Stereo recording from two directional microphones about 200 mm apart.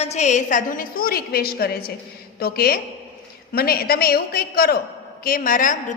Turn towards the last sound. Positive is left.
turn(degrees=40)  # may be behind; listen again after turning